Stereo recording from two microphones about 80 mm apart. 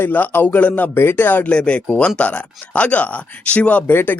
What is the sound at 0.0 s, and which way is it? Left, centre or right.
Speech, left.